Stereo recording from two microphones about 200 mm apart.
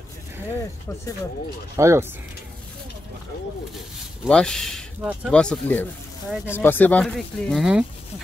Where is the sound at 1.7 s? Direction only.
15° right (ahead or behind).